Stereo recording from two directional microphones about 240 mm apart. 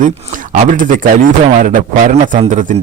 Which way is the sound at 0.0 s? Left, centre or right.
Right.